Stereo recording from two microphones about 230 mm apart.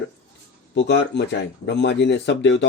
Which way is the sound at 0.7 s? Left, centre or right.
Left.